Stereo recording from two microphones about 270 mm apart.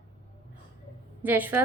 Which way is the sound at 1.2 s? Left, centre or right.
Centre.